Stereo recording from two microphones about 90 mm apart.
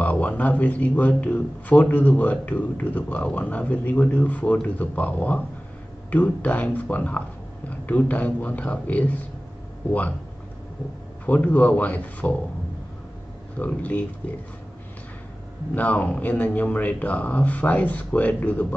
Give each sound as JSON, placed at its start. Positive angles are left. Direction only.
{"t": 0.0, "sound": "speech", "side_deg": 15}
{"t": 11.2, "sound": "speech", "side_deg": 20}
{"t": 13.6, "sound": "speech", "side_deg": 15}
{"t": 15.7, "sound": "speech", "side_deg": 15}